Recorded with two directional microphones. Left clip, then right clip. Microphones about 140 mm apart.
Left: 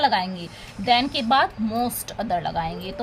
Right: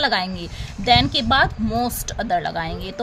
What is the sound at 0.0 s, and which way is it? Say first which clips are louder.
A woman's voice: even; 35° right (ahead or behind).